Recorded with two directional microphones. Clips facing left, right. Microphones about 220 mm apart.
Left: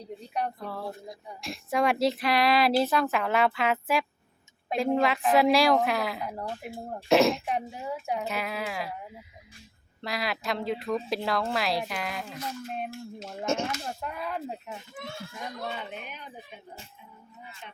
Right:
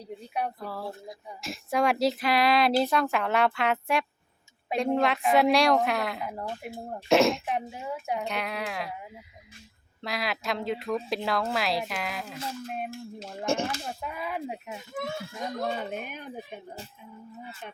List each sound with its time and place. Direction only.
0.3 s speech: 5° right (ahead or behind)
13.6 s speech: 30° right (ahead or behind)
13.8 s speech: 5° right (ahead or behind)
15.5 s speech: 45° right (ahead or behind)